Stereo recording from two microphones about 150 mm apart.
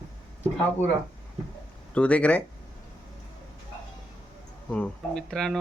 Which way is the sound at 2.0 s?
10° left (ahead or behind).